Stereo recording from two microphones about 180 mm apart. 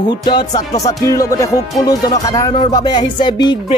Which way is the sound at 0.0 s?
25° left (ahead or behind).